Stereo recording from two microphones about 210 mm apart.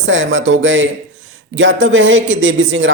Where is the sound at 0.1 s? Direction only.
65° right (ahead or behind).